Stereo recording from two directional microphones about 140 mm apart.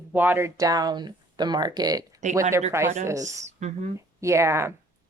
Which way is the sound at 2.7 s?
20° right (ahead or behind).